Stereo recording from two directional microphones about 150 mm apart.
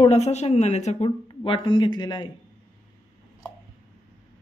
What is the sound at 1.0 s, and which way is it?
A woman's voice, 35° left (ahead or behind).